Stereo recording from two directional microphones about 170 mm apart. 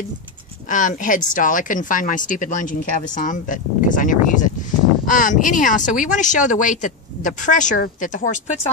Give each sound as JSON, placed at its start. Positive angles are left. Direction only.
{"t": 0.7, "sound": "speech", "side_deg": 50}